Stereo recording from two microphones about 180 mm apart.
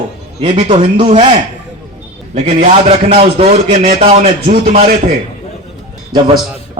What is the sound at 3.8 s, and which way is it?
A man's voice, 50° right (ahead or behind).